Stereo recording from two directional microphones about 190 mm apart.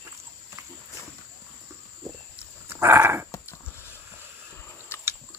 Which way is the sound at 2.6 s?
10° right (ahead or behind).